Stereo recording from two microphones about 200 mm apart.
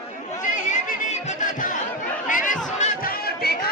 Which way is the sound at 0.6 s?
40° left (ahead or behind).